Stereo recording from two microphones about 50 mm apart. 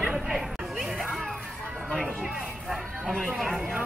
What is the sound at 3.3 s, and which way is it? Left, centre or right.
Speech, centre.